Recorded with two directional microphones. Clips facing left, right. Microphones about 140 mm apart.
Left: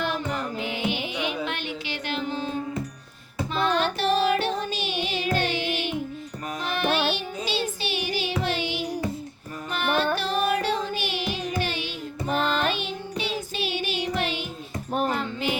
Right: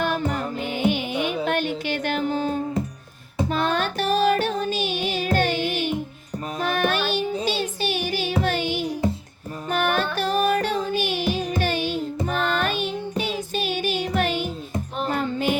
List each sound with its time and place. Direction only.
0.0 s music: 50° right (ahead or behind)